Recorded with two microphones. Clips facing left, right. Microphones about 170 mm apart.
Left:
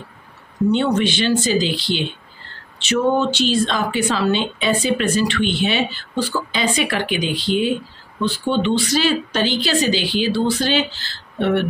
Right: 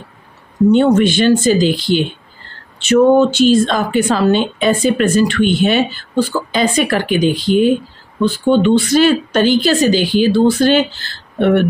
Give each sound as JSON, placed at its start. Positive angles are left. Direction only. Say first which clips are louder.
{"t": 0.7, "sound": "a woman's voice", "louder": "right 7 dB", "side_deg": -45}